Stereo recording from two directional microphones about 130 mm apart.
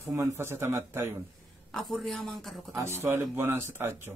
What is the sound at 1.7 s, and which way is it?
Speech, centre (ahead or behind).